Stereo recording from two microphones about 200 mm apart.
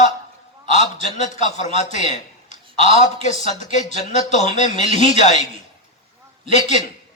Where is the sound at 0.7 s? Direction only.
35° left (ahead or behind).